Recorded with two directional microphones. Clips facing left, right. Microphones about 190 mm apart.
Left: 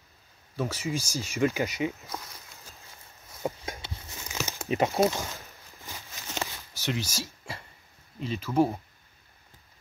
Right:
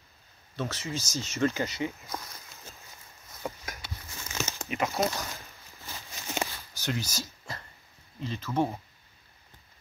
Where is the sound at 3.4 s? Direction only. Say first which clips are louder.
Left 5 dB; 25° left (ahead or behind).